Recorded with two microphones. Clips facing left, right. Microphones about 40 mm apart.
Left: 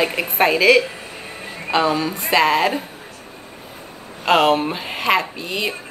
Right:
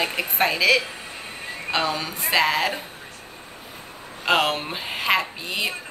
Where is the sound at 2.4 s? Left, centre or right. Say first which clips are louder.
Left 5 dB; left.